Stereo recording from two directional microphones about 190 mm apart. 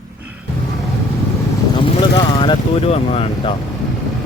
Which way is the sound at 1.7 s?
25° left (ahead or behind).